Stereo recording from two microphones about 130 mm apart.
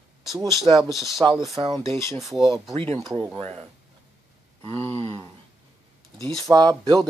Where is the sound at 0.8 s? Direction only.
Centre (ahead or behind).